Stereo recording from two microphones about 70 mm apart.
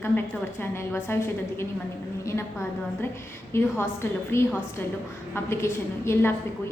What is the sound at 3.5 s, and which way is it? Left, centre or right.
A woman's voice, left.